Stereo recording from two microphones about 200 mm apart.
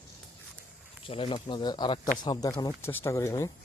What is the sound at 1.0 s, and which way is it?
Speech, 25° left (ahead or behind).